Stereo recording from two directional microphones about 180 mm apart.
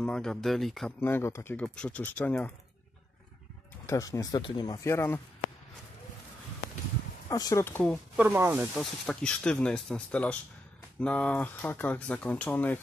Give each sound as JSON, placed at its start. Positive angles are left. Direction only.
{"t": 0.0, "sound": "speech", "side_deg": 5}
{"t": 1.0, "sound": "speech", "side_deg": 15}
{"t": 3.8, "sound": "speech", "side_deg": 15}
{"t": 7.2, "sound": "speech", "side_deg": 20}
{"t": 8.2, "sound": "speech", "side_deg": -15}
{"t": 8.7, "sound": "speech", "side_deg": 5}